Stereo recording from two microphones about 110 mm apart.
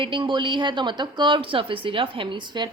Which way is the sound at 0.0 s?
50° right (ahead or behind).